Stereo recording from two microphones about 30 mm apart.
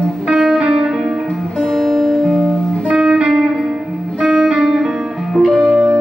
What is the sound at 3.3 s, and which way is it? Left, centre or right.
Music, centre.